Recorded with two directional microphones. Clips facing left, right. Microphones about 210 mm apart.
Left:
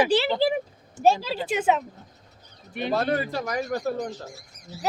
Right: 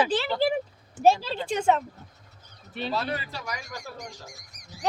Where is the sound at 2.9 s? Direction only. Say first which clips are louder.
Left 7 dB; 50° left (ahead or behind).